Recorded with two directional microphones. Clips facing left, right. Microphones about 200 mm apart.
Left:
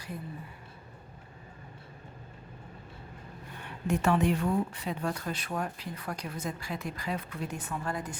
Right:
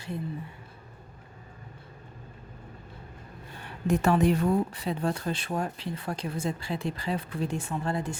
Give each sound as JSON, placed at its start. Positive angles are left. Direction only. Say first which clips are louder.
{"t": 3.6, "sound": "speech", "louder": "right 3 dB", "side_deg": -35}